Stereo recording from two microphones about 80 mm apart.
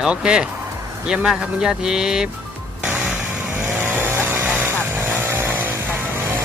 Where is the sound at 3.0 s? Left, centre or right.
Centre.